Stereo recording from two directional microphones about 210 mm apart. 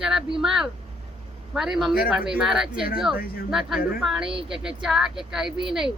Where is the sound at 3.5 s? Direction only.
Centre (ahead or behind).